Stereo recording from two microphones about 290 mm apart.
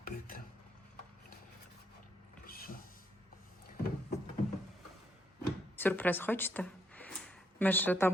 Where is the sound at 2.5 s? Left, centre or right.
Left.